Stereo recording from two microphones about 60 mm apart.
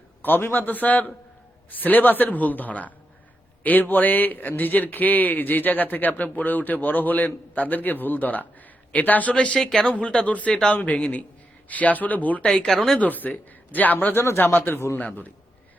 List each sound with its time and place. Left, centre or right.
0.2 s a man's voice: left
9.6 s speech: centre
9.8 s a man's voice: centre
12.5 s speech: centre
13.0 s a man's voice: left
14.1 s a man's voice: left
14.9 s a man's voice: left